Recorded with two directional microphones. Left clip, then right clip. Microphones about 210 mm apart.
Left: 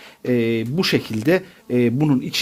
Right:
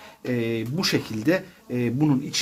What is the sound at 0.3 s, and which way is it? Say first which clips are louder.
Speech: left 6 dB; 30° left (ahead or behind).